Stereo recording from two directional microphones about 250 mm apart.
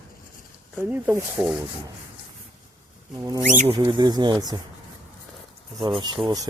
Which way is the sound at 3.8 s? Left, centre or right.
Centre.